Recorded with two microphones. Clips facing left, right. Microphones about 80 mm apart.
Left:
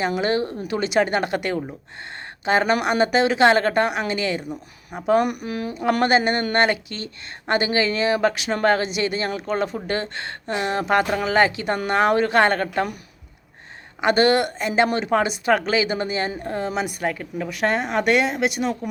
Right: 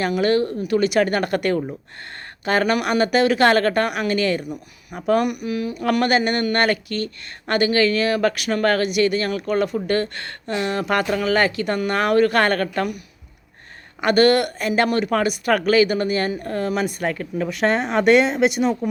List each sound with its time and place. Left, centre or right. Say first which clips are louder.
0.2 s speech: right 3 dB; left
1.2 s a woman's voice: right 3 dB; centre
2.4 s a woman's voice: even; left
5.1 s speech: even; left
14.0 s speech: right 2 dB; left; by 18.8 s centre